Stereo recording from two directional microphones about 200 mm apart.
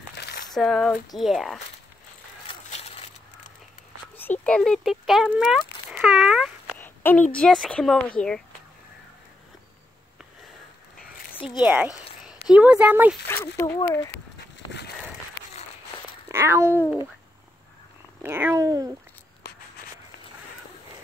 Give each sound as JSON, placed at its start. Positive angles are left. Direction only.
{"t": 0.1, "sound": "a sound", "side_deg": 55}
{"t": 0.5, "sound": "speech", "side_deg": 0}
{"t": 2.4, "sound": "a sound", "side_deg": 30}
{"t": 4.2, "sound": "speech", "side_deg": 5}
{"t": 6.7, "sound": "speech", "side_deg": 10}
{"t": 11.3, "sound": "speech", "side_deg": -5}
{"t": 13.6, "sound": "speech", "side_deg": 15}
{"t": 16.3, "sound": "speech", "side_deg": -15}
{"t": 18.2, "sound": "cat", "side_deg": -10}
{"t": 19.4, "sound": "walk", "side_deg": 55}